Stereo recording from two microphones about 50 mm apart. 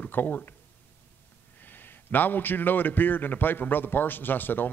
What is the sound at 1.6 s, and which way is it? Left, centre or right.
A man's voice, left.